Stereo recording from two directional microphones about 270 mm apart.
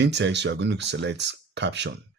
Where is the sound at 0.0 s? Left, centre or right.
Right.